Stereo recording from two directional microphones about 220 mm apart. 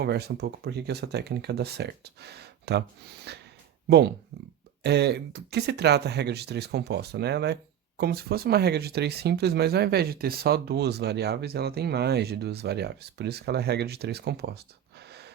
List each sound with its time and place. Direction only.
0.0 s speech: 50° right (ahead or behind)